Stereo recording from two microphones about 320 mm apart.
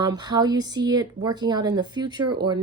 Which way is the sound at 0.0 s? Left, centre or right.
Centre.